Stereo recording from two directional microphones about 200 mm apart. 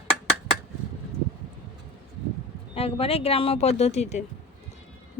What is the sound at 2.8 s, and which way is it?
Speech, 30° left (ahead or behind).